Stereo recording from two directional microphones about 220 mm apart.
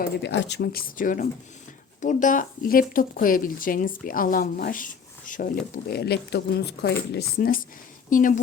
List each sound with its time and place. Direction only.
0.0 s speech: 55° left (ahead or behind); by 8.4 s 35° left (ahead or behind)